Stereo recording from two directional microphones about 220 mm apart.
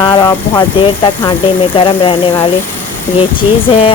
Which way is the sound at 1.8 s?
25° left (ahead or behind).